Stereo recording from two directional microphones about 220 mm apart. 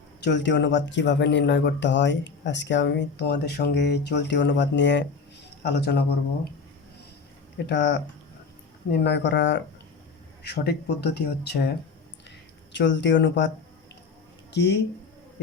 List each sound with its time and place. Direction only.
0.3 s speech: 55° left (ahead or behind)
7.7 s speech: 55° left (ahead or behind)
12.7 s speech: 55° left (ahead or behind)
14.5 s speech: 50° left (ahead or behind)